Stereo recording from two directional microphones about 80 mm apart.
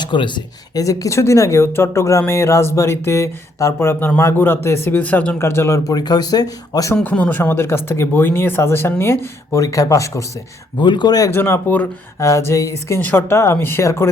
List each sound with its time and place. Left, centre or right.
0.0 s speech: left
0.7 s a man's voice: left; by 5.4 s centre
5.4 s speech: left
5.9 s speech: left
6.9 s speech: centre; by 10.2 s left
10.8 s speech: left
11.3 s a man's voice: left
13.0 s speech: left